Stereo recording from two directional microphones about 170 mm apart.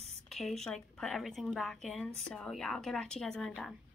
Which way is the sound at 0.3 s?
Centre (ahead or behind).